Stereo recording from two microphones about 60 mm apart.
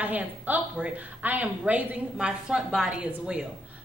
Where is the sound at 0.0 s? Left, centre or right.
Right.